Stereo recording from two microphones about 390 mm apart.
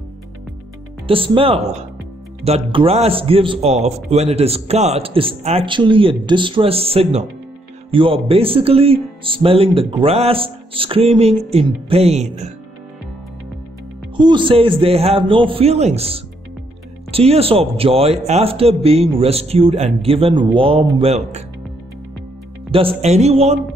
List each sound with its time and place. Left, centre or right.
1.0 s a man's voice: centre
14.1 s a man's voice: centre
22.7 s a man's voice: centre